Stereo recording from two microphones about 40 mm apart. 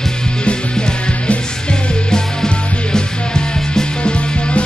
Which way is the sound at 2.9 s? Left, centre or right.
Centre.